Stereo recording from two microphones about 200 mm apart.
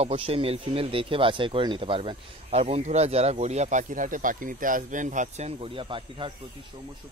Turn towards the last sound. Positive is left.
turn(degrees=-25)  # may be behind; listen again after turning